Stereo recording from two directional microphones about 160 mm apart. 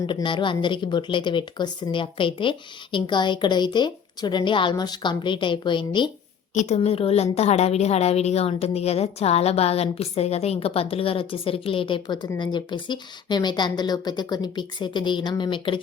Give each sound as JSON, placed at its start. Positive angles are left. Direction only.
{"t": 0.0, "sound": "a woman's voice", "side_deg": 30}
{"t": 6.5, "sound": "a woman's voice", "side_deg": 50}
{"t": 6.7, "sound": "a woman's voice", "side_deg": 35}